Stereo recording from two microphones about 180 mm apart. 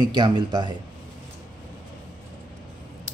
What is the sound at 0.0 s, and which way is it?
Speech, 25° right (ahead or behind).